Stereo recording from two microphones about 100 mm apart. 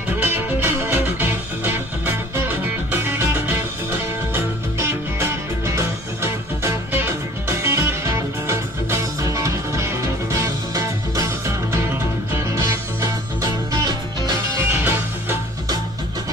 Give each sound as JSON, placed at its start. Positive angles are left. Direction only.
{"t": 0.2, "sound": "music", "side_deg": -20}
{"t": 13.4, "sound": "music", "side_deg": -40}
{"t": 14.6, "sound": "music", "side_deg": -25}